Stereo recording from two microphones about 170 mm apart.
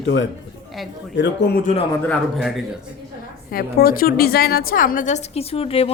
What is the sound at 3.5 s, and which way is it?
A woman's voice, 60° left (ahead or behind).